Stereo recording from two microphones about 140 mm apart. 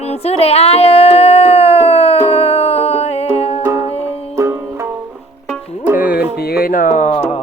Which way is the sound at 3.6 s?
20° right (ahead or behind).